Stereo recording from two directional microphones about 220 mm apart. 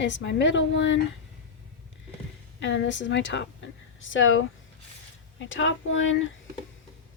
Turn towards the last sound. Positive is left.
turn(degrees=60)  # may be behind; listen again after turning